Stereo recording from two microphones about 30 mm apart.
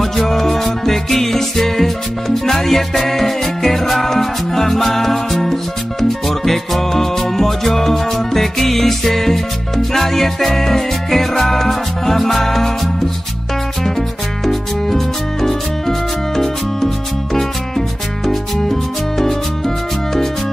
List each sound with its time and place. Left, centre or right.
0.0 s music: centre